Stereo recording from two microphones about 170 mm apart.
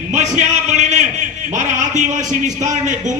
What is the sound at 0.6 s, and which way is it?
A man's voice, 45° right (ahead or behind).